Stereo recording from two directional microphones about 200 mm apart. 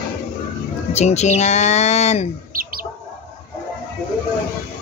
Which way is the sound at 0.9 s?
35° left (ahead or behind).